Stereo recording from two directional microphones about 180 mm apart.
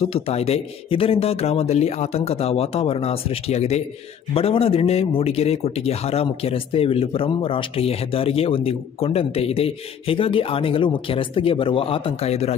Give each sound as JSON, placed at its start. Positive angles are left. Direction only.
{"t": 0.0, "sound": "speech", "side_deg": 35}